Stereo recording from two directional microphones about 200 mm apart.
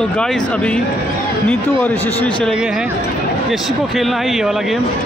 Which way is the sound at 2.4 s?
Centre (ahead or behind).